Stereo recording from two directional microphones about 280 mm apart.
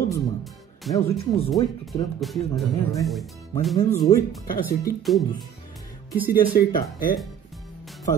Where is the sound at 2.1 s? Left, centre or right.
Centre.